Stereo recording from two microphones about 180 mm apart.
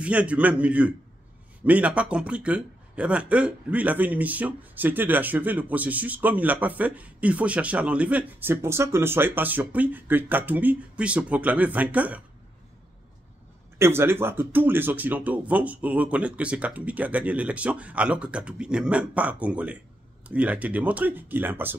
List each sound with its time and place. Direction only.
0.0 s a man's voice: 5° right (ahead or behind)
13.7 s a man's voice: 15° right (ahead or behind)